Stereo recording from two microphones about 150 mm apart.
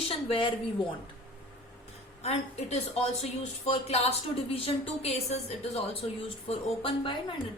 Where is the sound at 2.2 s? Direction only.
45° left (ahead or behind).